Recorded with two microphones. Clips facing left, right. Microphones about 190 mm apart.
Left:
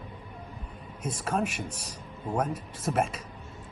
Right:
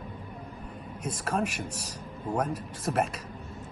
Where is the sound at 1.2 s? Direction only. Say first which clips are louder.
Even; centre (ahead or behind).